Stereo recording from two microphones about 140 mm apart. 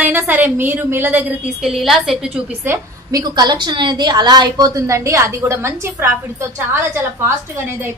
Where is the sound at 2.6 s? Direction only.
30° right (ahead or behind).